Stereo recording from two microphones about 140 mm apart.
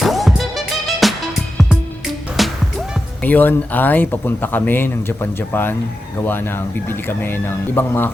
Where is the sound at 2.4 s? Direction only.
Centre (ahead or behind).